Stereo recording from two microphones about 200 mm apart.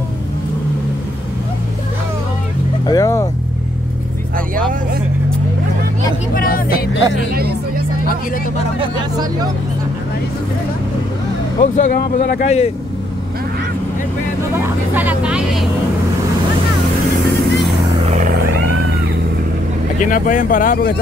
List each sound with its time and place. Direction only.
2.9 s speech: 15° left (ahead or behind)
6.3 s vehicle: 45° left (ahead or behind)
8.8 s speech: 20° right (ahead or behind)
11.6 s speech: 40° left (ahead or behind)
15.0 s vehicle: 5° right (ahead or behind)
18.3 s vehicle: 55° right (ahead or behind)
20.0 s speech: 40° left (ahead or behind)